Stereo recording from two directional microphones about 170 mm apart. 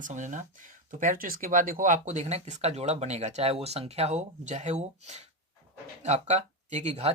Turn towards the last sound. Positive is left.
turn(degrees=-40)  # may be behind; listen again after turning